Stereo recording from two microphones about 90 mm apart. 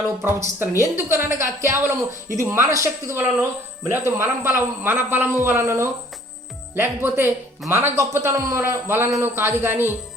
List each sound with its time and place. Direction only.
0.3 s a man's voice: 25° right (ahead or behind)